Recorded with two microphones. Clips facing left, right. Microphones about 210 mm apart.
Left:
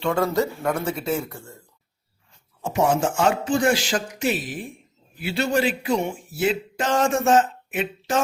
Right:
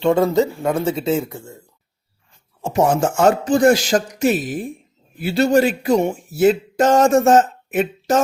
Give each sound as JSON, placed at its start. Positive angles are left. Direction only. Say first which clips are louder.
{"t": 0.0, "sound": "speech", "louder": "right 6 dB", "side_deg": -25}
{"t": 2.6, "sound": "speech", "louder": "right 5 dB", "side_deg": -30}
{"t": 2.8, "sound": "speech", "louder": "right 5 dB", "side_deg": -45}